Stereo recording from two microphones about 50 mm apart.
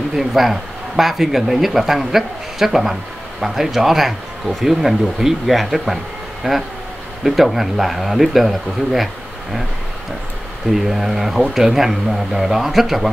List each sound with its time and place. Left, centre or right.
0.1 s speech: centre
6.4 s speech: centre
7.2 s speech: centre
10.7 s speech: centre